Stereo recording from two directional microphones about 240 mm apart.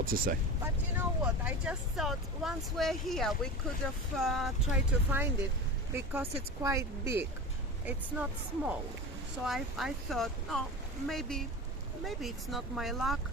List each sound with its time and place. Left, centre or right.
0.0 s speech: right
0.6 s speech: centre